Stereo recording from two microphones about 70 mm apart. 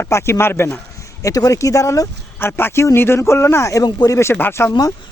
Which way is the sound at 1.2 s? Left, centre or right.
Left.